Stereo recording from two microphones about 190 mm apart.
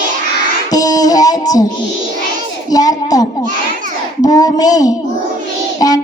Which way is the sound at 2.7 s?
20° left (ahead or behind).